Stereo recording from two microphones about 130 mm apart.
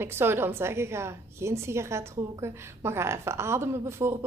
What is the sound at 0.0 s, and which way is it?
A woman's voice, 20° right (ahead or behind).